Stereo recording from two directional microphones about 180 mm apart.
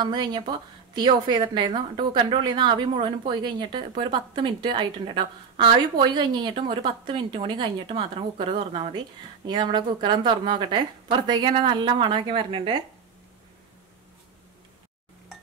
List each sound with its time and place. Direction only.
0.0 s a woman's voice: 25° right (ahead or behind)